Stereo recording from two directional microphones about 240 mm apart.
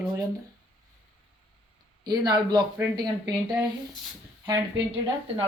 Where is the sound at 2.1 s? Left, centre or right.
Centre.